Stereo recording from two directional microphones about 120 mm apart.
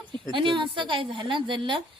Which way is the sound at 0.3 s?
40° right (ahead or behind).